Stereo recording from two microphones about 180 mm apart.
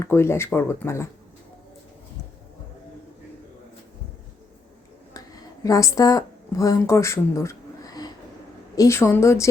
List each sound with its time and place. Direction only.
0.0 s speech: 15° left (ahead or behind)
5.6 s a woman's voice: 20° left (ahead or behind)